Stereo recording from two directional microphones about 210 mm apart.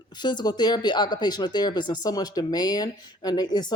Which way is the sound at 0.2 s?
20° left (ahead or behind).